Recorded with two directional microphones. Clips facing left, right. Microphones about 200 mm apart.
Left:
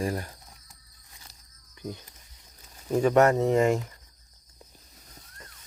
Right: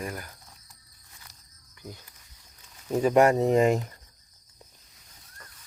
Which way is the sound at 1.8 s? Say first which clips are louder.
Left 6 dB; 20° left (ahead or behind).